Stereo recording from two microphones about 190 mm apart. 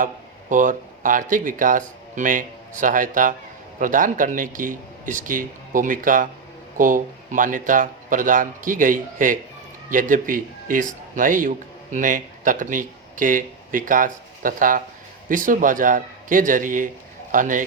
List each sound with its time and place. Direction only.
0.5 s a man's voice: 45° right (ahead or behind)